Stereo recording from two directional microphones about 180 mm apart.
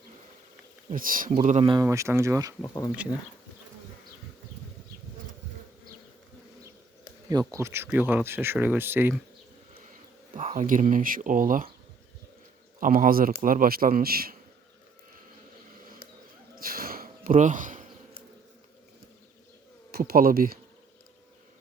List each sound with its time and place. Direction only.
0.9 s a man's voice: 50° right (ahead or behind)
1.6 s speech: 20° right (ahead or behind)
2.6 s speech: 20° left (ahead or behind)
7.3 s speech: 20° right (ahead or behind)
9.9 s speech: 45° right (ahead or behind)
12.8 s a man's voice: 50° right (ahead or behind)
16.6 s a sound: 55° right (ahead or behind)
19.9 s speech: 55° right (ahead or behind)